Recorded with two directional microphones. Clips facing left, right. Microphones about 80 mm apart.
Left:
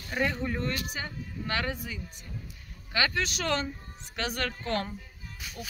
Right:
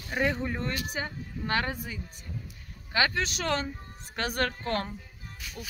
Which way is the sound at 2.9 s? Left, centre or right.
Right.